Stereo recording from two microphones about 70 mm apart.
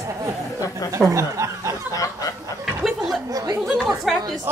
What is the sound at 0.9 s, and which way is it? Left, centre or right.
Speech, right.